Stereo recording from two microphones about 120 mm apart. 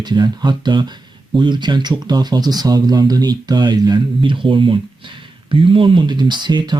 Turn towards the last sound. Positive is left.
turn(degrees=-40)  # may be behind; listen again after turning